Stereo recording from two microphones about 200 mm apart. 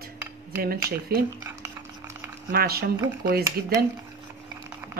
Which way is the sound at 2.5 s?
50° right (ahead or behind).